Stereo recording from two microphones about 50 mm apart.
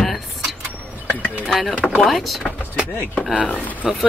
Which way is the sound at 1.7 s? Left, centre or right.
Left.